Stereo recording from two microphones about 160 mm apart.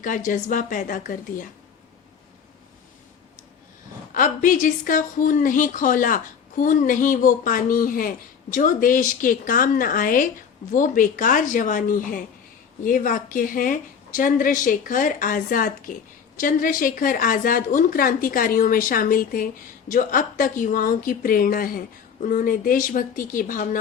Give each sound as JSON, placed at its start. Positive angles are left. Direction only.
{"t": 0.0, "sound": "a woman's voice", "side_deg": 55}
{"t": 4.1, "sound": "a woman's voice", "side_deg": 55}